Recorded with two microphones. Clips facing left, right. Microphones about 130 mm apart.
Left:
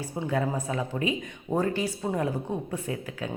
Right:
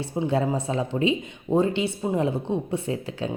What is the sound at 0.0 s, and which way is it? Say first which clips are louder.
Speech: right 4 dB; 25° right (ahead or behind).